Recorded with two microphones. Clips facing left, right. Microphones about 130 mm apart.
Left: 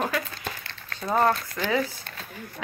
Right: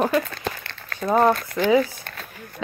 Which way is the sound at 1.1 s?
15° right (ahead or behind).